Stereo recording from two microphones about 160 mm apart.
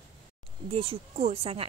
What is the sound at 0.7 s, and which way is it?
Speech, 35° right (ahead or behind).